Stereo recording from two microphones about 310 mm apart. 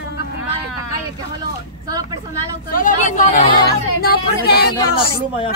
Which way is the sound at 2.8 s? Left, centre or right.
Left.